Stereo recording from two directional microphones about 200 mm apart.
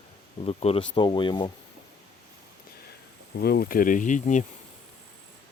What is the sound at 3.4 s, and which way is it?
Speech, 50° left (ahead or behind).